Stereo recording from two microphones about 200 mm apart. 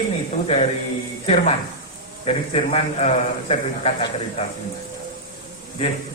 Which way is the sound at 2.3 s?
30° left (ahead or behind).